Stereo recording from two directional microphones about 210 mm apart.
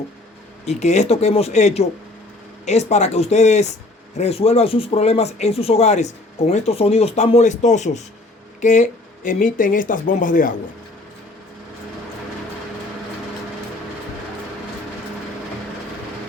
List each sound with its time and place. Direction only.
0.6 s speech: 35° left (ahead or behind)